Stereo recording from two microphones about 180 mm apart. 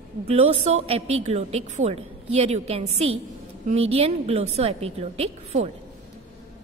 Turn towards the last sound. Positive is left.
turn(degrees=-35)  # may be behind; listen again after turning